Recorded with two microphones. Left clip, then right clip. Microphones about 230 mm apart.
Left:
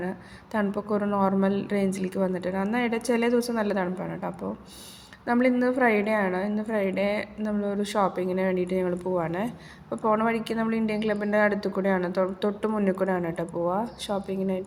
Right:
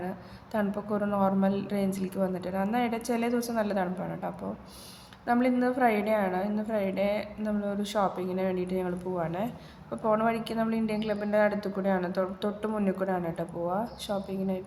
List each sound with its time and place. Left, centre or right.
0.5 s a woman's voice: centre